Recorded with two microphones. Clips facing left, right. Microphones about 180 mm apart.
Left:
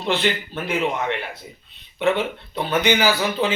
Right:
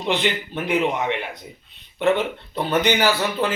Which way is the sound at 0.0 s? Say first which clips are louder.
Even; 15° right (ahead or behind).